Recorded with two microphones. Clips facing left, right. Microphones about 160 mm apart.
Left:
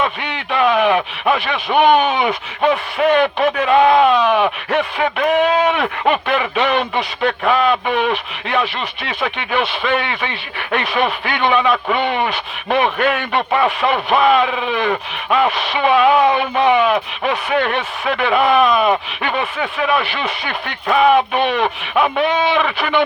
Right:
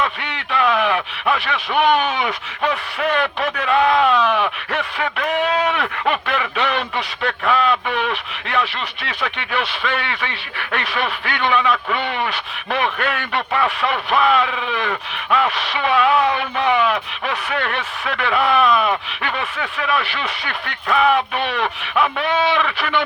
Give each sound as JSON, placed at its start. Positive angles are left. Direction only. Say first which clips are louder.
{"t": 0.5, "sound": "speech", "louder": "left 4 dB", "side_deg": 20}